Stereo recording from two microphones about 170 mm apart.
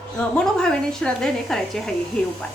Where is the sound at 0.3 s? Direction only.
5° left (ahead or behind).